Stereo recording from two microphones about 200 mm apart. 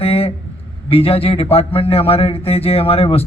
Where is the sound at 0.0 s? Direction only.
30° left (ahead or behind).